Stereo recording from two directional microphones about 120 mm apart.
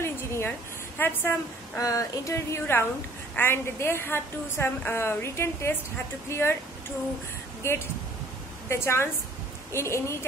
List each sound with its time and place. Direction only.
0.0 s a sound: 20° left (ahead or behind)
0.9 s a woman's voice: 15° left (ahead or behind)
1.8 s a woman's voice: 30° left (ahead or behind)
7.6 s a woman's voice: 20° left (ahead or behind)